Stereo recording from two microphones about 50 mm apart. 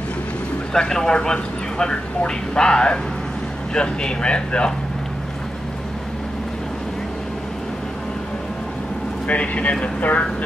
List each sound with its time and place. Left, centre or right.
0.7 s a man's voice: centre
9.3 s speech: left